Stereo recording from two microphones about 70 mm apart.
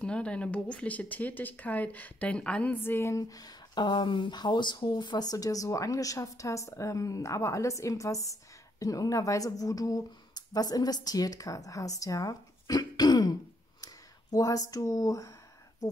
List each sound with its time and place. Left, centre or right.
0.0 s speech: centre
2.7 s a woman's voice: left
3.2 s speech: left
14.3 s speech: left